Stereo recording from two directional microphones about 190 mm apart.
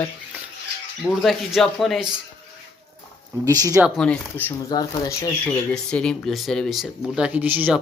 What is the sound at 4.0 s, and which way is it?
Speech, 5° left (ahead or behind).